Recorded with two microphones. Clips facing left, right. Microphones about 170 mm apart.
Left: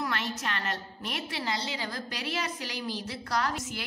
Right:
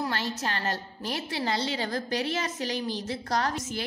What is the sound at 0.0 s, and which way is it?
A woman's voice, 30° right (ahead or behind).